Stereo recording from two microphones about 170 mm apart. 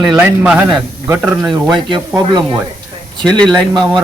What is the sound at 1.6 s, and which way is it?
Speech, 25° right (ahead or behind).